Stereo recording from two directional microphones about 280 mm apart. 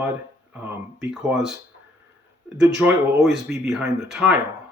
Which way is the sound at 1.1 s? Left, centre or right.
Centre.